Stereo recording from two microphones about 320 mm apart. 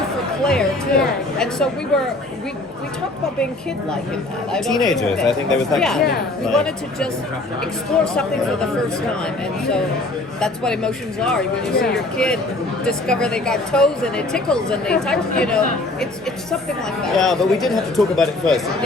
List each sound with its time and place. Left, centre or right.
0.4 s speech: centre
4.5 s speech: centre
10.4 s speech: centre